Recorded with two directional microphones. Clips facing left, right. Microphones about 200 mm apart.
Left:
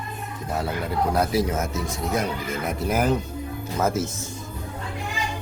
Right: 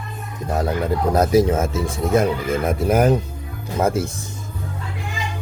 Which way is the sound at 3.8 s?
30° right (ahead or behind).